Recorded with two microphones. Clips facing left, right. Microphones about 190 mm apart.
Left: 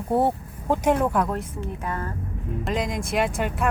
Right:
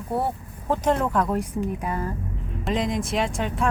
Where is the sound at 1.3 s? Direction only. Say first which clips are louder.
Right 4 dB; 10° right (ahead or behind).